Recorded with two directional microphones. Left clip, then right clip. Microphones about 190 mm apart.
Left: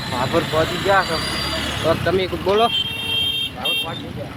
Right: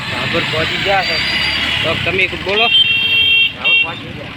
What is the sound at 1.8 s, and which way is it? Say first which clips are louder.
Speech: right 4 dB; 25° left (ahead or behind).